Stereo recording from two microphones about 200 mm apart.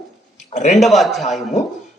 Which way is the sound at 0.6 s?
35° left (ahead or behind).